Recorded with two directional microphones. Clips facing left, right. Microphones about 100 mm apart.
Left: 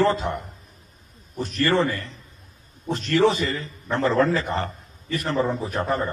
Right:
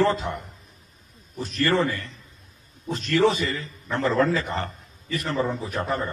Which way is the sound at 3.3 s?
35° left (ahead or behind).